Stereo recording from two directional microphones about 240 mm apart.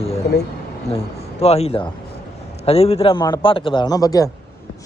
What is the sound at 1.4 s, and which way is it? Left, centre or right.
A man's voice, left.